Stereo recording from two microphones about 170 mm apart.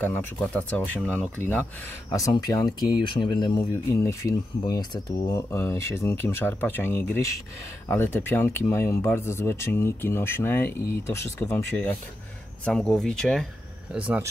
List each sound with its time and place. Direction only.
0.0 s speech: 10° left (ahead or behind)
2.0 s speech: 20° left (ahead or behind); by 13.5 s 5° left (ahead or behind)
13.9 s speech: 10° right (ahead or behind)